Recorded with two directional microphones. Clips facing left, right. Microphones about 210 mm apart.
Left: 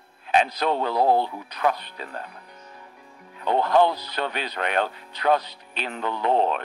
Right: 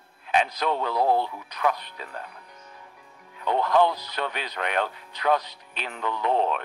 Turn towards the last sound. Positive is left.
turn(degrees=35)  # may be behind; listen again after turning